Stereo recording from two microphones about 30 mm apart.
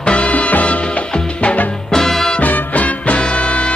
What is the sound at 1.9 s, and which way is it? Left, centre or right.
Music, centre.